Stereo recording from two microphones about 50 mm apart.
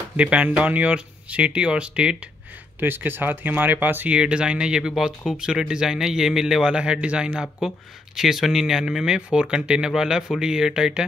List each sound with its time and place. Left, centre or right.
0.2 s speech: right
2.8 s speech: right
4.1 s speech: right